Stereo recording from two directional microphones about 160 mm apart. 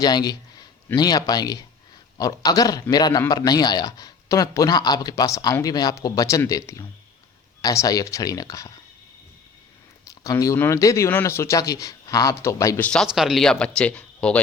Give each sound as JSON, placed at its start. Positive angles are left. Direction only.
{"t": 0.0, "sound": "a man's voice", "side_deg": 25}
{"t": 10.1, "sound": "a man's voice", "side_deg": 20}
{"t": 12.9, "sound": "speech", "side_deg": 0}